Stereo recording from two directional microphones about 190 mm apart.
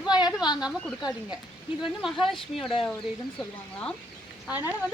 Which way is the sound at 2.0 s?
Centre (ahead or behind).